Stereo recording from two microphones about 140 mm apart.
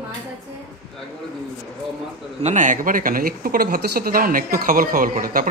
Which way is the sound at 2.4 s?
55° right (ahead or behind).